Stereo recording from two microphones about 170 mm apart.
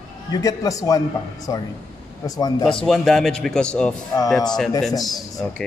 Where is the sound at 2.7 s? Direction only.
5° left (ahead or behind).